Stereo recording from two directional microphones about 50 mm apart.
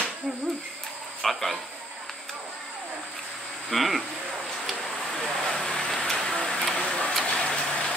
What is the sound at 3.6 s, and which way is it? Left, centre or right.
Speech, centre.